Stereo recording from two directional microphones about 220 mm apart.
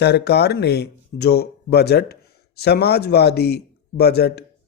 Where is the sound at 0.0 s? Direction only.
50° left (ahead or behind).